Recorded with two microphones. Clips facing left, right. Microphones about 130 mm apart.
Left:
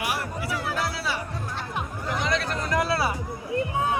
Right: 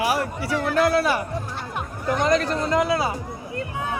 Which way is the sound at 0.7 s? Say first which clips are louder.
Right 13 dB; 55° right (ahead or behind).